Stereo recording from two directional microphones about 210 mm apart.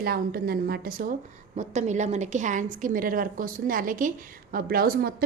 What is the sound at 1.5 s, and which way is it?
A woman's voice, 35° right (ahead or behind).